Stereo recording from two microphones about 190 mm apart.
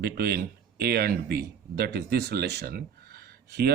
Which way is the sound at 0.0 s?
55° right (ahead or behind).